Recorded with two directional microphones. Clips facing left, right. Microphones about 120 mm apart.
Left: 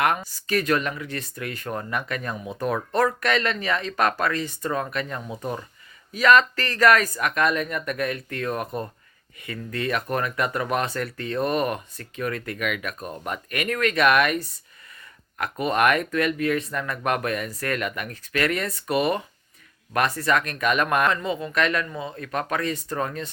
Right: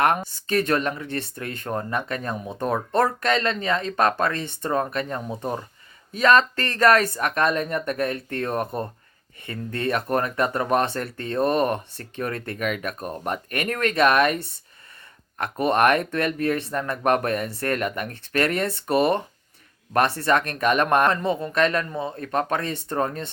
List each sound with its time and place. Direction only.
0.0 s speech: 30° right (ahead or behind)